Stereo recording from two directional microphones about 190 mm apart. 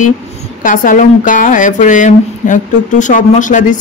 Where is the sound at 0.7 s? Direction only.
45° left (ahead or behind).